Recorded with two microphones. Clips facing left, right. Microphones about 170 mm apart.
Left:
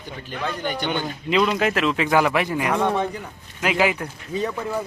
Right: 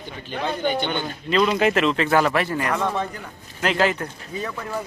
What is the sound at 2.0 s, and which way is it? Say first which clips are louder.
Speech: even; 15° left (ahead or behind).